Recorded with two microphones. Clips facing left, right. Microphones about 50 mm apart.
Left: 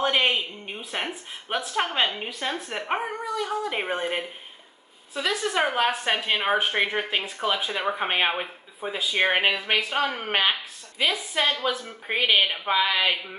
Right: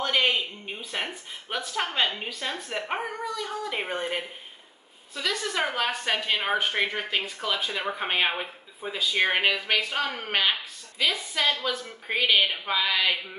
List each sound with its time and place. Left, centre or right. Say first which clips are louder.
0.0 s a sound: left 2 dB; centre
1.7 s a woman's voice: left 2 dB; centre
10.5 s a woman's voice: left 1 dB; centre